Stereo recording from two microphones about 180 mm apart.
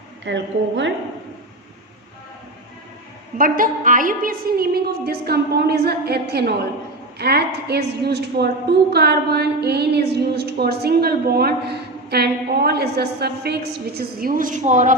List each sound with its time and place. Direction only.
0.3 s a woman's voice: 80° right
3.3 s a woman's voice: 50° right (ahead or behind)